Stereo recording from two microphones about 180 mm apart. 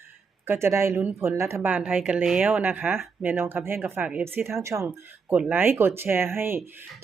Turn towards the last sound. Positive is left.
turn(degrees=-15)  # may be behind; listen again after turning